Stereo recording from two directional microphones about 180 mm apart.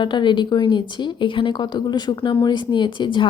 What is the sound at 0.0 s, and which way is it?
A woman's voice, 25° left (ahead or behind).